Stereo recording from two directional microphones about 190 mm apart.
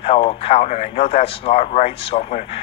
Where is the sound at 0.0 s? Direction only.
30° left (ahead or behind).